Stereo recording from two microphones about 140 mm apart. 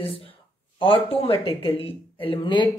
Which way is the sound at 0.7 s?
40° left (ahead or behind).